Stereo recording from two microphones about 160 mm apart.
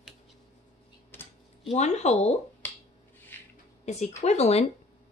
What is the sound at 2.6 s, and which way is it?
Finger snapping, 10° left (ahead or behind).